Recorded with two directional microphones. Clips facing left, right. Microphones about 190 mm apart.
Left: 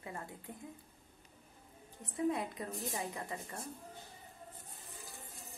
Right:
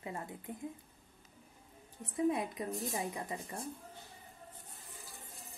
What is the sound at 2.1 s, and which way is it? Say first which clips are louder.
Speech: right 2 dB; 20° right (ahead or behind).